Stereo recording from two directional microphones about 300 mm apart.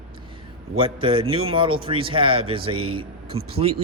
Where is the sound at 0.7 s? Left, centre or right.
Centre.